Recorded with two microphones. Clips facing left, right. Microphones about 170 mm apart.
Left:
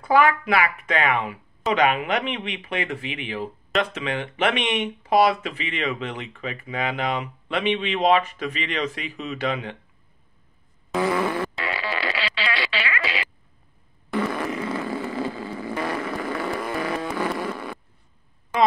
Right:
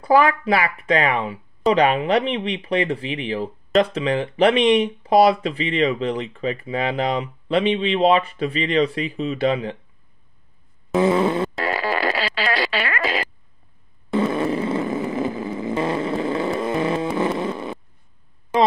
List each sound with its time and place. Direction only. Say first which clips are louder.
0.0 s speech: right 2 dB; 35° right (ahead or behind)
11.0 s fart: right 5 dB; 25° right (ahead or behind)
11.5 s fart: right 6 dB; 45° right (ahead or behind)
14.1 s fart: right 5 dB; 25° right (ahead or behind)